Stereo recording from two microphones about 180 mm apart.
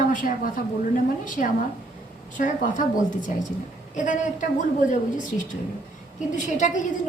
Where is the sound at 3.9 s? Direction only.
45° left (ahead or behind).